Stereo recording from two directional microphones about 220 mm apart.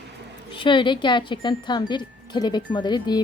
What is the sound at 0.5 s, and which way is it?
Wind chime, 20° left (ahead or behind).